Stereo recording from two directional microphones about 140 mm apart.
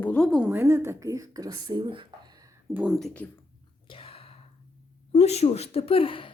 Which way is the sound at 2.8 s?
Centre (ahead or behind).